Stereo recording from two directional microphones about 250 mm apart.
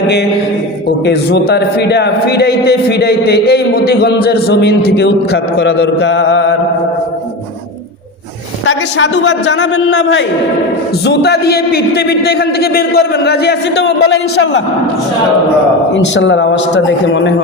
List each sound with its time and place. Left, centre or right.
1.0 s a man's voice: left
8.6 s a man's voice: left
16.1 s a man's voice: left